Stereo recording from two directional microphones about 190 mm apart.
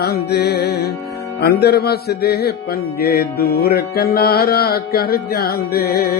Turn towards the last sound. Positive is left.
turn(degrees=50)  # may be behind; listen again after turning